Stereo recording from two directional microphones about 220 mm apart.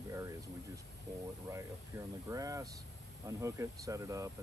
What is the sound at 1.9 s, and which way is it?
Speech, 10° right (ahead or behind).